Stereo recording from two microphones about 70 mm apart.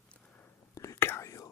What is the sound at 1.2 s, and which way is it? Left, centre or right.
Whispering, left.